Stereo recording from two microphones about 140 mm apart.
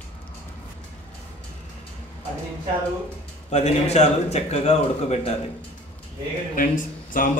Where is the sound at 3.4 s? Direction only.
50° left (ahead or behind).